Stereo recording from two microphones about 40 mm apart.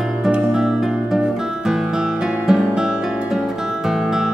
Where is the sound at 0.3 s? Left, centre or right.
Centre.